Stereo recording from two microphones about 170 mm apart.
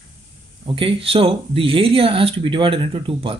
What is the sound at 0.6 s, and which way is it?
Speech, 30° right (ahead or behind).